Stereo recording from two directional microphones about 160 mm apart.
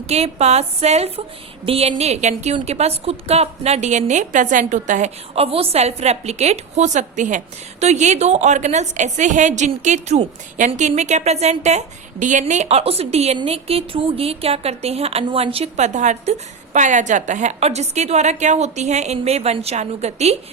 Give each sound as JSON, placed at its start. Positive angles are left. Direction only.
{"t": 0.1, "sound": "a woman's voice", "side_deg": -40}